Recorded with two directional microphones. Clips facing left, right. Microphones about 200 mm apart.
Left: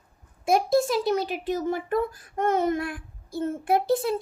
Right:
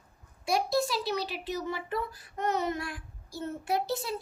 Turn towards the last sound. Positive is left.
turn(degrees=55)  # may be behind; listen again after turning